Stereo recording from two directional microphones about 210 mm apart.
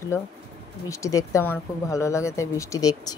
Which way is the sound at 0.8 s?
15° left (ahead or behind).